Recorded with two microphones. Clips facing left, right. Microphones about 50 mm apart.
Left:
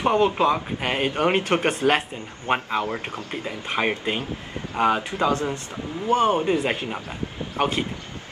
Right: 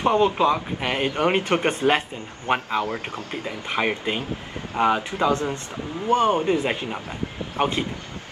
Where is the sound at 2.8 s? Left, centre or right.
Left.